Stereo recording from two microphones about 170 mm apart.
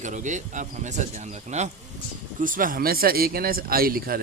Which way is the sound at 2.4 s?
55° right (ahead or behind).